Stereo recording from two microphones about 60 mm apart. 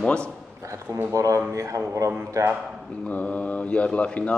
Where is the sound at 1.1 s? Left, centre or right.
Right.